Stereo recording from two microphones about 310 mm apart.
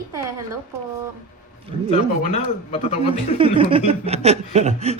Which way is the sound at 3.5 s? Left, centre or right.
Centre.